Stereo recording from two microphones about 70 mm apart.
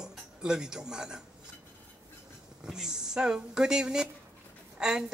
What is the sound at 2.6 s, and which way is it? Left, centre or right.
A man's voice, centre.